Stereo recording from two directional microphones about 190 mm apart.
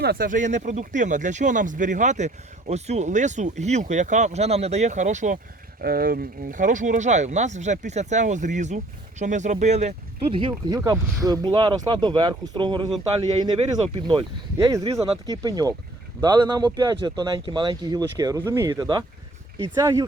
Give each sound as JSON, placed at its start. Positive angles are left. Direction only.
{"t": 0.0, "sound": "speech", "side_deg": -50}
{"t": 5.8, "sound": "speech", "side_deg": -50}
{"t": 14.1, "sound": "speech", "side_deg": -20}